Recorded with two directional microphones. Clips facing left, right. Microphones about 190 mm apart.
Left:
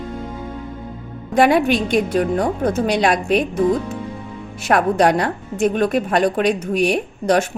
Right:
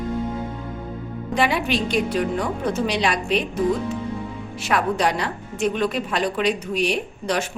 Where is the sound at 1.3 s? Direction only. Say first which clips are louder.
Left 7 dB; 50° left (ahead or behind).